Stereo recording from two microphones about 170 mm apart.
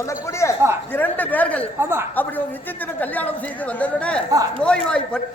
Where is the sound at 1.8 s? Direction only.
15° right (ahead or behind).